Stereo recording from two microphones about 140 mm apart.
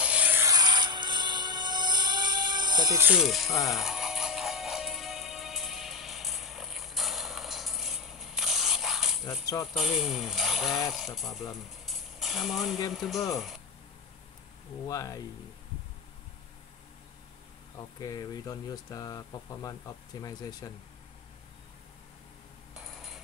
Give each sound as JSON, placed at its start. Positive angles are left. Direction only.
{"t": 0.0, "sound": "rub", "side_deg": -10}
{"t": 0.5, "sound": "music", "side_deg": -30}
{"t": 3.2, "sound": "speech", "side_deg": 0}
{"t": 3.7, "sound": "music", "side_deg": -5}
{"t": 9.8, "sound": "speech", "side_deg": 0}
{"t": 11.8, "sound": "mechanisms", "side_deg": 0}
{"t": 12.9, "sound": "speech", "side_deg": 0}
{"t": 14.9, "sound": "speech", "side_deg": 25}
{"t": 17.9, "sound": "speech", "side_deg": 25}